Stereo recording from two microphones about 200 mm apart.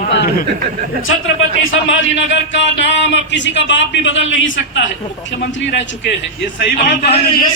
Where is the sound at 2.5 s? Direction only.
65° left (ahead or behind).